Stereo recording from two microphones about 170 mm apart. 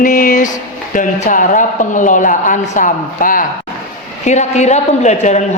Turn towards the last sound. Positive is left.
turn(degrees=40)  # may be behind; listen again after turning